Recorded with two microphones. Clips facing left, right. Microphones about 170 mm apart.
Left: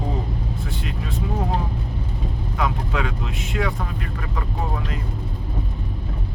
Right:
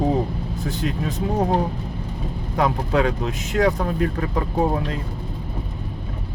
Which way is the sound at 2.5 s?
35° right (ahead or behind).